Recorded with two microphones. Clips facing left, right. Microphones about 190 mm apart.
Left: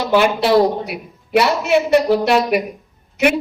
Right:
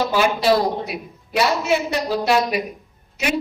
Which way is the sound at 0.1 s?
65° left (ahead or behind).